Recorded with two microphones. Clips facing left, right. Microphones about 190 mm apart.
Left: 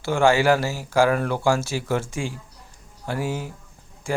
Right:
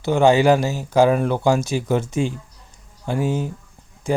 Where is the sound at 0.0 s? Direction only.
20° right (ahead or behind).